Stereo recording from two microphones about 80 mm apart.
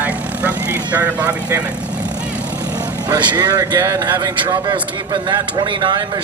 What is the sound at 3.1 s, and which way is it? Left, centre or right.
Speech, right.